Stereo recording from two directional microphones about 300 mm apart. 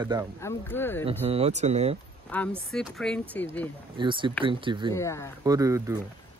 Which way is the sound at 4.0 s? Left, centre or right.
Centre.